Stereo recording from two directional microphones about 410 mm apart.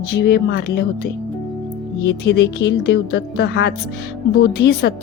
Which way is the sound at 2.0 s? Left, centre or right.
Left.